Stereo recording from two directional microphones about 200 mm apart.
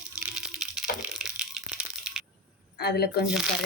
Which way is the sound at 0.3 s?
5° right (ahead or behind).